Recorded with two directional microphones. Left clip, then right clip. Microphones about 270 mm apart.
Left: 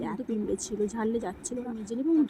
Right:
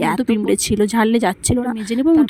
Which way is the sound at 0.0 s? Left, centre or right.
Right.